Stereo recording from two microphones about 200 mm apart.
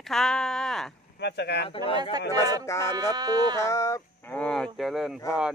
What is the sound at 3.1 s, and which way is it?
Speech, 20° right (ahead or behind).